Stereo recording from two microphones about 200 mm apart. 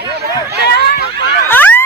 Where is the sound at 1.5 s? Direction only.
10° left (ahead or behind).